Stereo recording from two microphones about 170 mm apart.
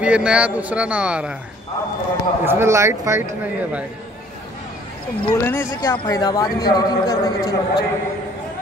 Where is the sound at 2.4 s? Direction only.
15° right (ahead or behind).